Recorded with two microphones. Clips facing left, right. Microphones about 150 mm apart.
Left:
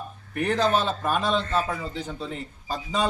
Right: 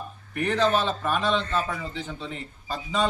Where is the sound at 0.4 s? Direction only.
40° left (ahead or behind).